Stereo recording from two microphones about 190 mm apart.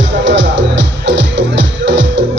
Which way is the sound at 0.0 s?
70° right (ahead or behind).